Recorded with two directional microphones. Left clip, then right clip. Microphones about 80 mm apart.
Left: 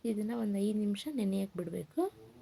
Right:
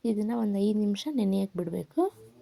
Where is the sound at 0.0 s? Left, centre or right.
Right.